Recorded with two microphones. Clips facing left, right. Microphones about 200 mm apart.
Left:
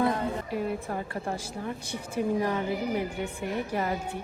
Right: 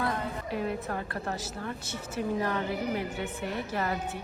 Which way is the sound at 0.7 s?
10° left (ahead or behind).